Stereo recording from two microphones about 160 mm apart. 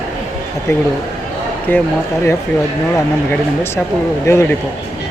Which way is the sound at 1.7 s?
10° left (ahead or behind).